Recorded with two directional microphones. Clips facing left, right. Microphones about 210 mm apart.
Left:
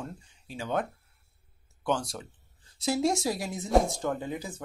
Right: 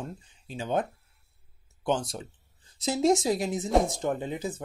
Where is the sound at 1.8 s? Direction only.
20° right (ahead or behind).